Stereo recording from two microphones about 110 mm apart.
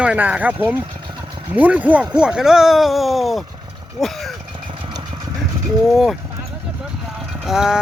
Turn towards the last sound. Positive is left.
turn(degrees=-5)  # may be behind; listen again after turning